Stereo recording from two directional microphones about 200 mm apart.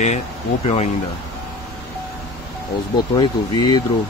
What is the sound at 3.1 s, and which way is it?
Speech, 20° left (ahead or behind).